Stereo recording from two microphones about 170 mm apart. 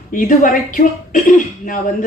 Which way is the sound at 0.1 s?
50° left (ahead or behind).